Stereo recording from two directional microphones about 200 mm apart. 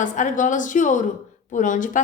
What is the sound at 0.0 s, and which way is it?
A woman's voice, 40° left (ahead or behind).